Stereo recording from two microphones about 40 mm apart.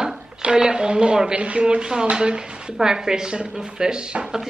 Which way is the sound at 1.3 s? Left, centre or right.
Right.